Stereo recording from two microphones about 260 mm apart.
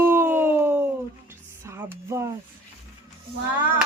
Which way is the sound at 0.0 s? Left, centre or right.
Centre.